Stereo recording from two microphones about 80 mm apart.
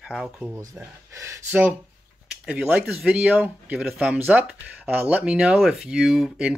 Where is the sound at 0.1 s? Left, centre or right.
Centre.